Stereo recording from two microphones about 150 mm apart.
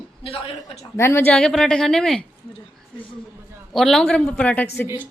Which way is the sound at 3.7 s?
Centre (ahead or behind).